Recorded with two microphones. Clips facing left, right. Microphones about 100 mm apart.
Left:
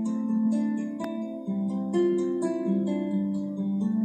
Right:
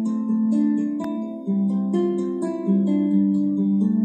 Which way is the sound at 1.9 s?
25° right (ahead or behind).